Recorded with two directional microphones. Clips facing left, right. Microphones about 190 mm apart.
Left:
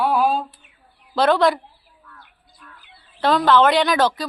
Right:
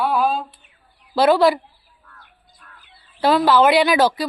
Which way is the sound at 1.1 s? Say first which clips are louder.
Right 2 dB; 5° right (ahead or behind).